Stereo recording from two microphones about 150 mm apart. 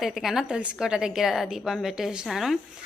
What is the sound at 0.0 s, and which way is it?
Speech, centre (ahead or behind).